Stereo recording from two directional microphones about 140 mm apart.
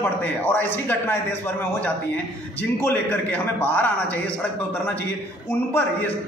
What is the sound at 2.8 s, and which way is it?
A man's voice, 15° left (ahead or behind).